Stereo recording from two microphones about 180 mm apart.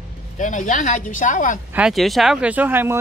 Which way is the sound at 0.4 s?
45° left (ahead or behind).